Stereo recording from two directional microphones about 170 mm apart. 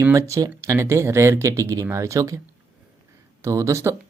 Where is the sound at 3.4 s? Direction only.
20° right (ahead or behind).